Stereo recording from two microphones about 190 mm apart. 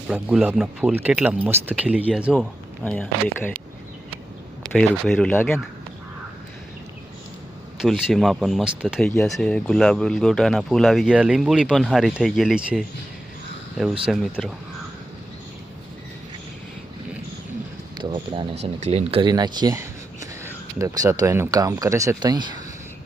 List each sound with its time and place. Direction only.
0.1 s speech: 5° right (ahead or behind)
4.7 s speech: centre (ahead or behind)
7.8 s speech: centre (ahead or behind)
17.9 s a sound: 25° right (ahead or behind)
18.6 s speech: 35° right (ahead or behind)